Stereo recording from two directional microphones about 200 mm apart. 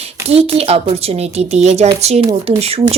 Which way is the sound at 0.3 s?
30° right (ahead or behind).